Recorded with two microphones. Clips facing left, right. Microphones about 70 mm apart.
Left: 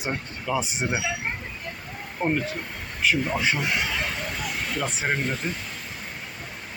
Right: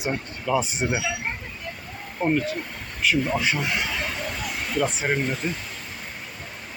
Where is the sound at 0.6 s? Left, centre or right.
Left.